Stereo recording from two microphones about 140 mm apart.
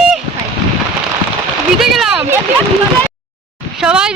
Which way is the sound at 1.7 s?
Centre (ahead or behind).